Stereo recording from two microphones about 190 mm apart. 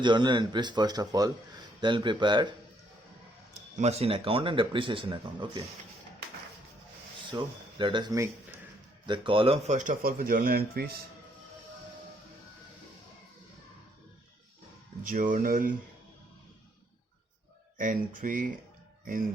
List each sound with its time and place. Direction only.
0.0 s speech: 25° right (ahead or behind)
3.5 s speech: 35° right (ahead or behind)
7.3 s speech: 25° right (ahead or behind); by 10.9 s 55° right (ahead or behind)
15.0 s speech: 45° right (ahead or behind)
17.7 s speech: 45° right (ahead or behind)